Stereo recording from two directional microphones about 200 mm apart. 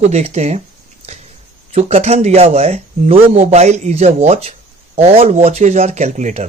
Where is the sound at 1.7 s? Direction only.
30° right (ahead or behind).